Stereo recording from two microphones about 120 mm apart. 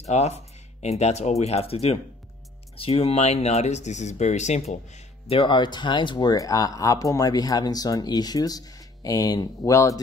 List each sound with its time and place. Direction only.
0.0 s speech: 65° left (ahead or behind)
5.3 s speech: 45° left (ahead or behind); by 9.9 s 25° left (ahead or behind)